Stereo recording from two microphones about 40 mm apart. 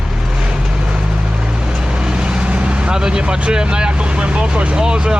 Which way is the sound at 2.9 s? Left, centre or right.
Centre.